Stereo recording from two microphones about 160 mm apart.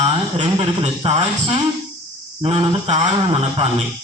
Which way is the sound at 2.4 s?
40° right (ahead or behind).